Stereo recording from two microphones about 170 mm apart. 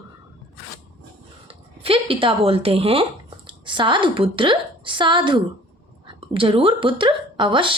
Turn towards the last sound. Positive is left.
turn(degrees=-30)  # may be behind; listen again after turning